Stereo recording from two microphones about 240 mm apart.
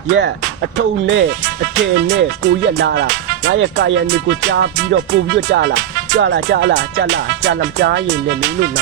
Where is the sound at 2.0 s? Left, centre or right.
Right.